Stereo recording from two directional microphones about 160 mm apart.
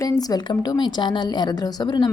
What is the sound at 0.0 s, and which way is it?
A woman's voice, 25° left (ahead or behind).